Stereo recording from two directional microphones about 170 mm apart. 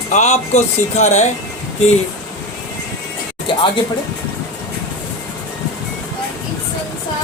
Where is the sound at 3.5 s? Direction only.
30° left (ahead or behind).